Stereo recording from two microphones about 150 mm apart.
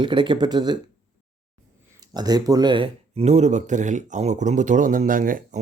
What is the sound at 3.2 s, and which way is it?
Speech, 50° right (ahead or behind).